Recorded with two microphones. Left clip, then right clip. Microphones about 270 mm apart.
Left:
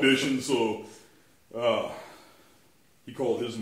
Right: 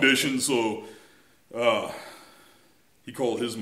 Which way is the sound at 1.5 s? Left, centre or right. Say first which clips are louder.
Right 3 dB; right.